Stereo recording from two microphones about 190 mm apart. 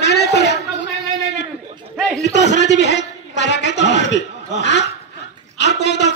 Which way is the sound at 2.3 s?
65° left (ahead or behind).